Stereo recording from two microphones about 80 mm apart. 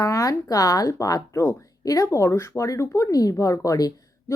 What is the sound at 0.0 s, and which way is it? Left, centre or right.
Speech, left.